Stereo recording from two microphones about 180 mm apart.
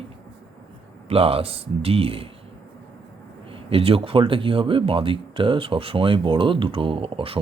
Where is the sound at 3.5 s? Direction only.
30° right (ahead or behind).